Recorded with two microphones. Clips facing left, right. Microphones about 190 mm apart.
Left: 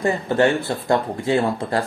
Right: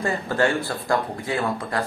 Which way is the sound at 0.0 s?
20° left (ahead or behind).